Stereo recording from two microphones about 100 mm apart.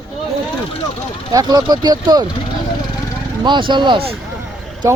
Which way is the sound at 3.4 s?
50° right (ahead or behind).